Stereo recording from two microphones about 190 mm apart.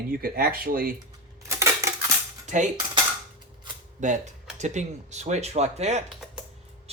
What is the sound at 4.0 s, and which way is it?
Speech, 40° right (ahead or behind).